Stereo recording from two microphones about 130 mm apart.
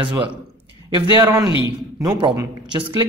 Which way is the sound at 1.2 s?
30° right (ahead or behind).